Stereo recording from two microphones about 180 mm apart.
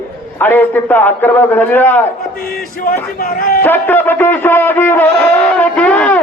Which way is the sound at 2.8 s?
50° left (ahead or behind).